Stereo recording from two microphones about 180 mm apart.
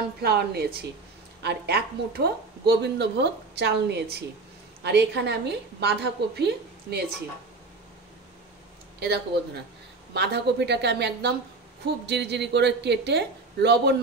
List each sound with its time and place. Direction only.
0.2 s a woman's voice: 60° right (ahead or behind)
9.0 s a woman's voice: 65° right (ahead or behind)